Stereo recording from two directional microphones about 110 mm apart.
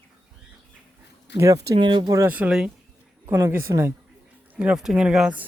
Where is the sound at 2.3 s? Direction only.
10° right (ahead or behind).